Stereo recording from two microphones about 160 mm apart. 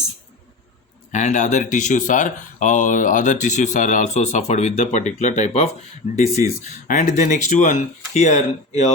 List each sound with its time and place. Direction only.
1.1 s speech: 50° left (ahead or behind)